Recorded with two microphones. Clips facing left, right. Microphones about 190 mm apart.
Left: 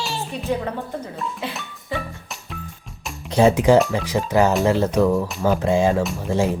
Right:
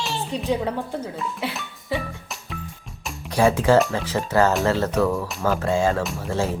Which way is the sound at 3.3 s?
20° left (ahead or behind).